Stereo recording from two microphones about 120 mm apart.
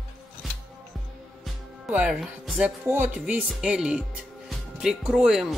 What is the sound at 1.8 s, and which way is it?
Speech, 10° right (ahead or behind).